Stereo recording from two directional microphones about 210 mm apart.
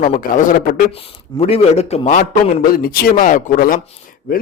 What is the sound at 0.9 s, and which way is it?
A man's voice, 30° left (ahead or behind).